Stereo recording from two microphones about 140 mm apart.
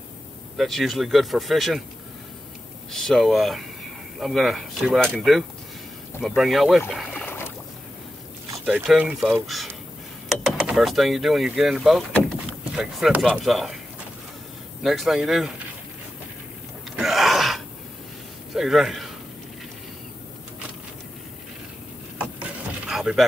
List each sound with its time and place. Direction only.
0.6 s speech: centre (ahead or behind)
2.9 s speech: centre (ahead or behind)
7.2 s boat: 15° left (ahead or behind)
8.6 s speech: 5° right (ahead or behind)
9.5 s speech: centre (ahead or behind)
12.1 s a sound: centre (ahead or behind)
13.2 s speech: centre (ahead or behind)
14.8 s speech: centre (ahead or behind)
16.9 s gasp: centre (ahead or behind)
18.5 s a man's voice: centre (ahead or behind)
22.2 s vehicle: 5° right (ahead or behind)